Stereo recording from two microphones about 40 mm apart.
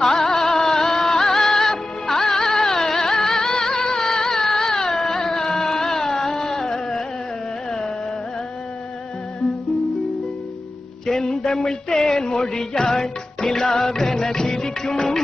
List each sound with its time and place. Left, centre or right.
0.2 s music: centre
11.1 s music: centre
11.3 s a sound: centre
12.5 s music: centre